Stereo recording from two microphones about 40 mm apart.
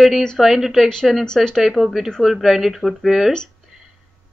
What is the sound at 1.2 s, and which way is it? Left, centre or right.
Speech, centre.